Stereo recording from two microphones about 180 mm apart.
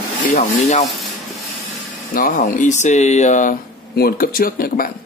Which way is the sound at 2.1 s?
50° left (ahead or behind).